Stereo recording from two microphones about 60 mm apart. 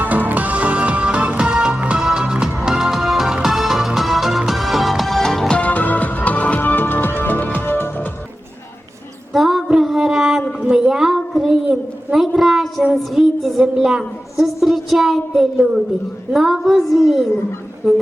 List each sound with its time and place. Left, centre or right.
0.0 s music: right; by 5.5 s centre
5.5 s music: left
9.3 s female singing: centre
9.7 s music: centre
10.7 s a sound: centre
12.9 s music: centre
16.3 s a sound: centre